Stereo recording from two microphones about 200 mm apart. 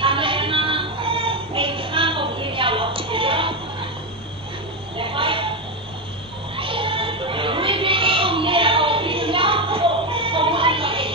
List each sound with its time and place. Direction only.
0.0 s music: 25° right (ahead or behind)
4.9 s a sound: 25° right (ahead or behind)
6.5 s music: 25° right (ahead or behind)